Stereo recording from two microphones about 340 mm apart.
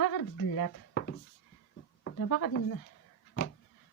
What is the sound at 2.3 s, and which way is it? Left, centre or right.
Speech, left.